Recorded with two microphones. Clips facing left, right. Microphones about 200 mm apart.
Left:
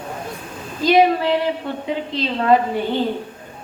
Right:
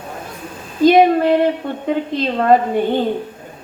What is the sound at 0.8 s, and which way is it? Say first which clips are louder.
A woman's voice: right 4 dB; 50° right (ahead or behind).